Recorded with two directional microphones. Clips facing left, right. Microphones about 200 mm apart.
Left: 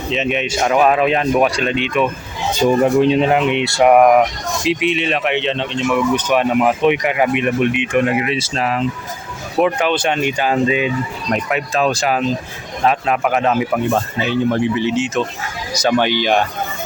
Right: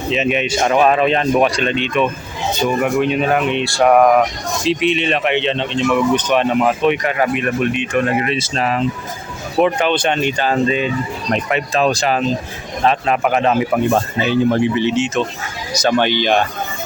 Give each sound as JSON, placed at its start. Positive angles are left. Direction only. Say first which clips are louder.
{"t": 0.1, "sound": "speech", "louder": "right 2 dB", "side_deg": 0}
{"t": 2.6, "sound": "speech", "louder": "left 4 dB", "side_deg": 30}